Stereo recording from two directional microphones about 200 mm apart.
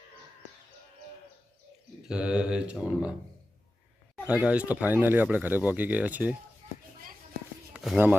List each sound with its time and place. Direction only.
2.0 s speech: 5° right (ahead or behind)
4.3 s speech: 5° right (ahead or behind)
6.6 s a sound: 35° right (ahead or behind)
7.7 s speech: 5° right (ahead or behind)